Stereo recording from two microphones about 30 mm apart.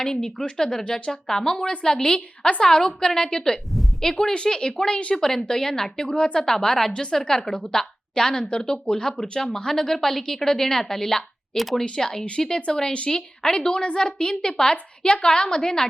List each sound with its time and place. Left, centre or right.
0.0 s a woman's voice: left
5.1 s a woman's voice: centre
6.4 s a woman's voice: centre
6.9 s a woman's voice: left
7.2 s a woman's voice: centre; by 9.4 s left
9.6 s a woman's voice: centre
11.5 s speech: centre
11.8 s a woman's voice: left